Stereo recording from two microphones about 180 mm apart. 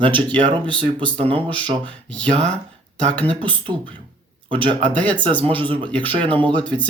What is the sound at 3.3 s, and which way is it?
Speech, 30° right (ahead or behind).